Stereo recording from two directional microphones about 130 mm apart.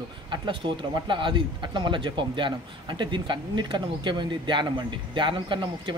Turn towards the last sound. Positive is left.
turn(degrees=-40)  # may be behind; listen again after turning